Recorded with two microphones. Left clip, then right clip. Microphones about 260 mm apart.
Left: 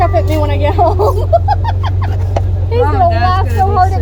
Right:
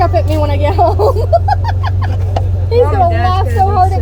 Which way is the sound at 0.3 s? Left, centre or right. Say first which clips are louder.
Even; right.